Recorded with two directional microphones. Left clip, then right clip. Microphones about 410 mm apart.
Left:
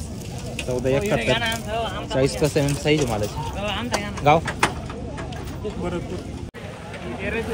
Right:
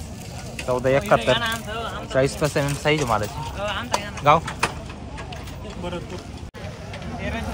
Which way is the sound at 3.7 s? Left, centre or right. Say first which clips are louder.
Even; left.